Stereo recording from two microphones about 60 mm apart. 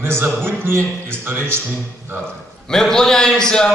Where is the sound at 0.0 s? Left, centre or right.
Right.